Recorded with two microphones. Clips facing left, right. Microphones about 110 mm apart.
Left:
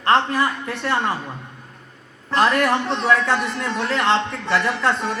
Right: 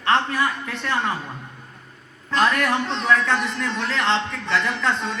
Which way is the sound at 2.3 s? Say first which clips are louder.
Left 3 dB; 20° left (ahead or behind).